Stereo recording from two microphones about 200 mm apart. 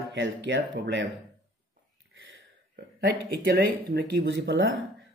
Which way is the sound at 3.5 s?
55° right (ahead or behind).